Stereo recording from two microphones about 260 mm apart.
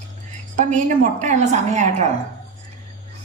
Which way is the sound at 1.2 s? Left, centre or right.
Right.